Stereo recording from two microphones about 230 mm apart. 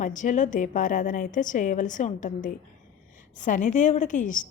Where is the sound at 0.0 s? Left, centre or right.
Left.